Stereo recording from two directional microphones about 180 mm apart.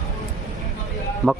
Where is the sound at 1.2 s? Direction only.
15° right (ahead or behind).